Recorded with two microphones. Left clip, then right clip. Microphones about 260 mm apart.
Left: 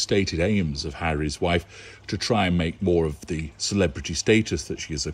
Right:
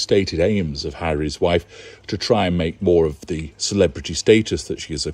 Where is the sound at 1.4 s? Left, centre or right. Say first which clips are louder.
Right 6 dB; right.